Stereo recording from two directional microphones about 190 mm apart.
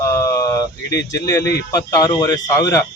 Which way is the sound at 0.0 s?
15° left (ahead or behind).